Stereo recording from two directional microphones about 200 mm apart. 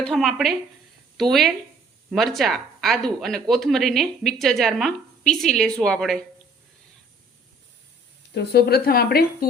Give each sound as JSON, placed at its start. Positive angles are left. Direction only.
{"t": 0.0, "sound": "speech", "side_deg": 0}
{"t": 8.3, "sound": "speech", "side_deg": 55}